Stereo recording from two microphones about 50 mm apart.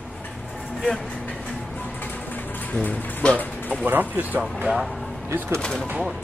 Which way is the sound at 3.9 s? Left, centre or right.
Right.